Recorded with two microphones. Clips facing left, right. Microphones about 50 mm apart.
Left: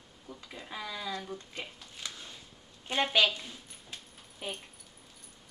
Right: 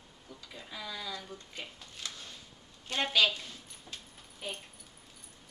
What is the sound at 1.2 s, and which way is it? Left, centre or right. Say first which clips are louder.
Speech: left 4 dB; left.